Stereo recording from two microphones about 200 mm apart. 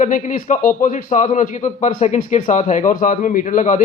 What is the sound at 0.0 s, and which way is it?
A man's voice, 40° left (ahead or behind).